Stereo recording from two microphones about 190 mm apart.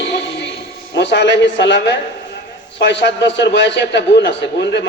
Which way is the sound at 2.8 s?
70° left (ahead or behind).